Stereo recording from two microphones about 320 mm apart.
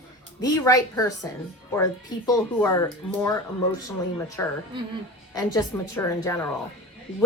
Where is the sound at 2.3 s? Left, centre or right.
Centre.